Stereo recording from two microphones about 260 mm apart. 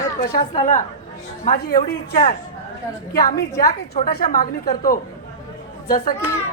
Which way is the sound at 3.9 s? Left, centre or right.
Left.